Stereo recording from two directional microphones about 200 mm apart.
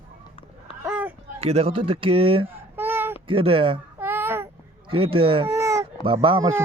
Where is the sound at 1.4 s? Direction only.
30° right (ahead or behind).